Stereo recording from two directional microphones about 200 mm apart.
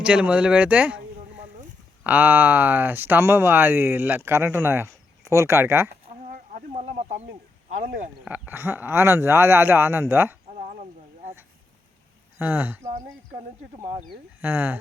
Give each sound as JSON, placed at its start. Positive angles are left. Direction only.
{"t": 0.0, "sound": "speech", "side_deg": -5}
{"t": 2.0, "sound": "speech", "side_deg": -10}
{"t": 6.3, "sound": "a sound", "side_deg": -45}
{"t": 8.2, "sound": "speech", "side_deg": -10}
{"t": 12.4, "sound": "speech", "side_deg": -10}
{"t": 14.4, "sound": "speech", "side_deg": -10}